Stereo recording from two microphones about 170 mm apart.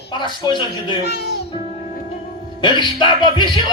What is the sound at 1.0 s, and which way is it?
Speech, 70° left (ahead or behind).